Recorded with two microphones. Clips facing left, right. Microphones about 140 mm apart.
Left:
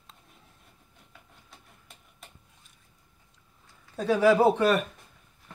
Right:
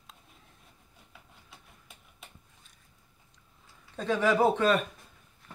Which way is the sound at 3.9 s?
10° left (ahead or behind).